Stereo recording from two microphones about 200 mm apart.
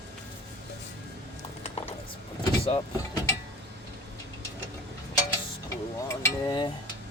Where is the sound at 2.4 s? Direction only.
30° left (ahead or behind).